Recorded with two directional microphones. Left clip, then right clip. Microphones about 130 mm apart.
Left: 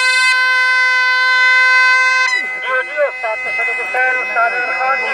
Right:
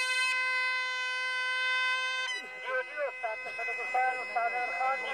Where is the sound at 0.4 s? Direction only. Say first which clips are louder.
Left 18 dB; 30° right (ahead or behind).